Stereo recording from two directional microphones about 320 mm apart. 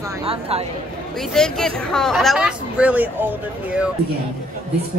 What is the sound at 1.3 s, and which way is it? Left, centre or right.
Speech, centre.